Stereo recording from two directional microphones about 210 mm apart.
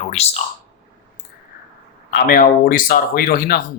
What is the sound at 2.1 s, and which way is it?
Speech, 45° left (ahead or behind).